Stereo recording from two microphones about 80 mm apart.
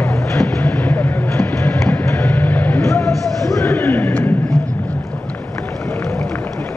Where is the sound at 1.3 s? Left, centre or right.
Left.